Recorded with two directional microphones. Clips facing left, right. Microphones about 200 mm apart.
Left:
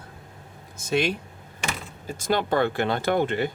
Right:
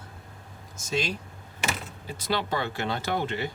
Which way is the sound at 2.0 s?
50° left (ahead or behind).